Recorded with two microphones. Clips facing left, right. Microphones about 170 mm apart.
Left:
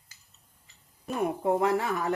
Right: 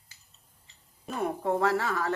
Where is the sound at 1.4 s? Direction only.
20° left (ahead or behind).